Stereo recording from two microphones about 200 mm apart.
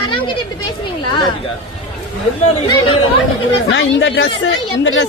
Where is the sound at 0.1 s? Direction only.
25° left (ahead or behind).